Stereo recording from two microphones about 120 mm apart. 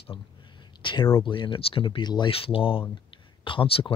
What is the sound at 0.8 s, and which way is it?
Speech, 40° left (ahead or behind).